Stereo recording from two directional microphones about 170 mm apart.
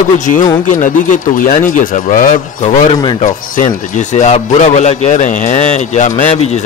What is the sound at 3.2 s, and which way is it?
A man's voice, 50° left (ahead or behind).